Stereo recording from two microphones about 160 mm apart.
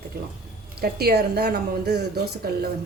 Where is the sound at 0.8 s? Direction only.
85° right.